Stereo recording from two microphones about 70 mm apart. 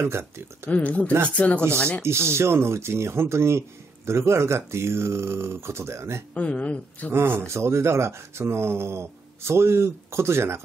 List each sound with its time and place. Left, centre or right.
0.0 s speech: right
0.7 s speech: left
2.0 s speech: right
6.3 s speech: centre
7.1 s speech: right